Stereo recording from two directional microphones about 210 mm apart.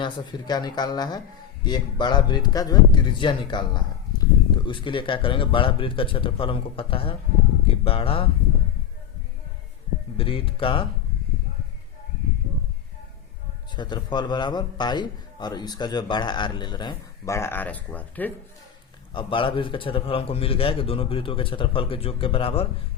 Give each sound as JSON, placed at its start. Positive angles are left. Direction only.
{"t": 0.0, "sound": "a man's voice", "side_deg": 20}
{"t": 10.2, "sound": "a man's voice", "side_deg": 25}
{"t": 13.7, "sound": "a man's voice", "side_deg": 20}
{"t": 19.1, "sound": "a man's voice", "side_deg": 25}